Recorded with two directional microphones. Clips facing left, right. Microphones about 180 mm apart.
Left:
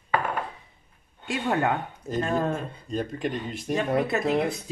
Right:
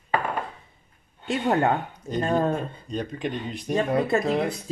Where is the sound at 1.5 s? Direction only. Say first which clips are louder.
Right 3 dB; 35° right (ahead or behind).